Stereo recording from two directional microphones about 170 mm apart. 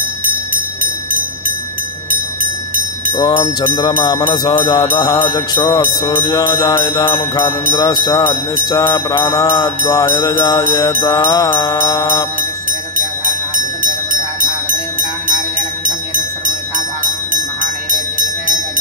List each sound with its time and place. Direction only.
3.2 s mantra: 25° left (ahead or behind)
8.6 s music: 15° left (ahead or behind)
11.1 s mantra: 20° left (ahead or behind)
14.7 s jingle bell: 55° right (ahead or behind)